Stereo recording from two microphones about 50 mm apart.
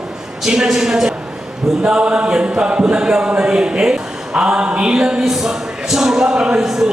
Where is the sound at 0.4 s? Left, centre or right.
Centre.